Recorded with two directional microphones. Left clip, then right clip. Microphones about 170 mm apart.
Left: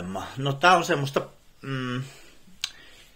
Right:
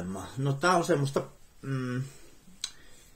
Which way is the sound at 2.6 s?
20° right (ahead or behind).